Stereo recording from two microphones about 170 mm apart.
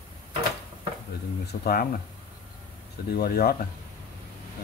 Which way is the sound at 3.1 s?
65° left (ahead or behind).